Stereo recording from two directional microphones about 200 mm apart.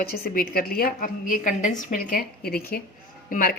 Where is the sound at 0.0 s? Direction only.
50° left (ahead or behind).